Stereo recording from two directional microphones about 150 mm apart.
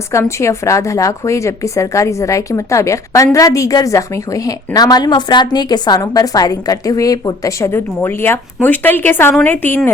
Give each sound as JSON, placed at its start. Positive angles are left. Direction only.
{"t": 0.1, "sound": "a woman's voice", "side_deg": 20}